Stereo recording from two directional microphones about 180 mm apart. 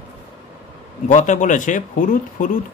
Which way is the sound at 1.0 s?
45° left (ahead or behind).